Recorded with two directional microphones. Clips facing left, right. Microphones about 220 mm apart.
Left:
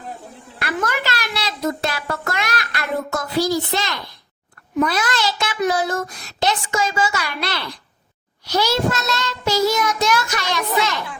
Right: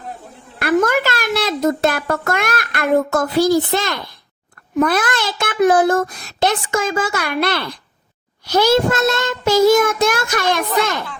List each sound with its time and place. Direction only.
0.6 s a child's voice: 45° right (ahead or behind)